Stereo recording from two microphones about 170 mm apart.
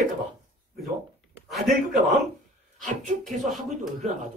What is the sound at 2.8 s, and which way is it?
Speech, 45° right (ahead or behind).